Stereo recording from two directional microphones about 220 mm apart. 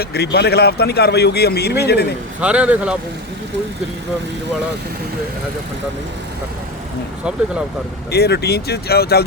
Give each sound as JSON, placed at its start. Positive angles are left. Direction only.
{"t": 0.0, "sound": "speech", "side_deg": 45}
{"t": 2.4, "sound": "speech", "side_deg": -5}
{"t": 7.3, "sound": "speech", "side_deg": -5}
{"t": 8.1, "sound": "speech", "side_deg": 50}